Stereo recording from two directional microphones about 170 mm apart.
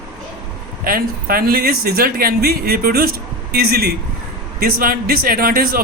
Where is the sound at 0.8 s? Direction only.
60° right (ahead or behind).